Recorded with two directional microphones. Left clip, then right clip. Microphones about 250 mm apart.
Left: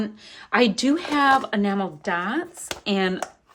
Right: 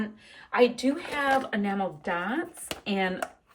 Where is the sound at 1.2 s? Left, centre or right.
Centre.